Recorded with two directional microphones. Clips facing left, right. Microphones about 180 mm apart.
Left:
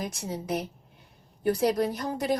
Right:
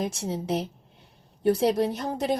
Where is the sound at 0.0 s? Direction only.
25° right (ahead or behind).